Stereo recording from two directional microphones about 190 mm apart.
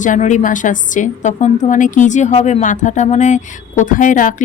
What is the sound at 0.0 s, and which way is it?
A woman's voice, 40° left (ahead or behind).